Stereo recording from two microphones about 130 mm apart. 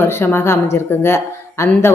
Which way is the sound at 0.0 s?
15° left (ahead or behind).